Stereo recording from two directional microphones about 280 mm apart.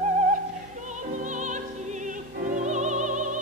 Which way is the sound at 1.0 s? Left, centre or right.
Right.